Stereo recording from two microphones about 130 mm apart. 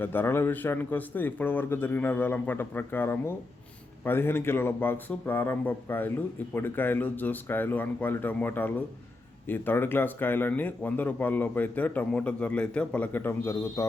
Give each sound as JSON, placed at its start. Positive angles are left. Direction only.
{"t": 0.0, "sound": "speech", "side_deg": 15}